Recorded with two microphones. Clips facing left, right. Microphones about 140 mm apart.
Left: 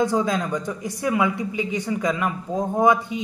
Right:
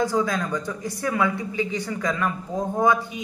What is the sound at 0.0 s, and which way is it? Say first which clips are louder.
Speech: left 2 dB; 20° left (ahead or behind).